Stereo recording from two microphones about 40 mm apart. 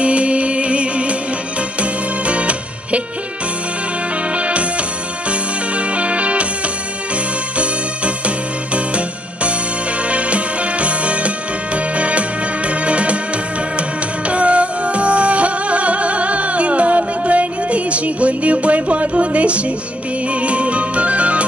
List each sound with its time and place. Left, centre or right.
0.0 s music: right
4.4 s music: right
5.8 s music: right
8.7 s music: right